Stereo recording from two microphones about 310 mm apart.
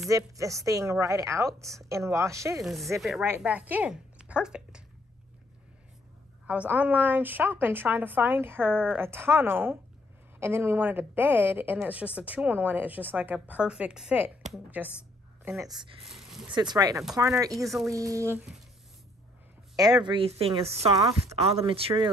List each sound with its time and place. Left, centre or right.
0.1 s a woman's voice: centre
6.4 s a woman's voice: centre
16.1 s a sound: centre
16.4 s a woman's voice: centre
19.8 s a woman's voice: centre